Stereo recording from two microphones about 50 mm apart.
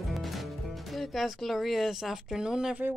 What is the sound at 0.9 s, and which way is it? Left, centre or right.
Speech, centre.